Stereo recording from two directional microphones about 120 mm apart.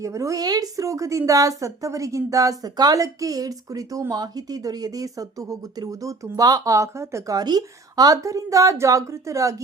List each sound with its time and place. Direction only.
0.0 s a woman's voice: 25° right (ahead or behind)